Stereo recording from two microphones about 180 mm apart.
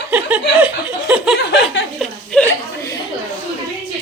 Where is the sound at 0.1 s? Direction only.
10° right (ahead or behind).